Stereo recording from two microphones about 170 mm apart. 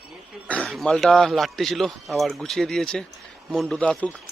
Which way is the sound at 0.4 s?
5° left (ahead or behind).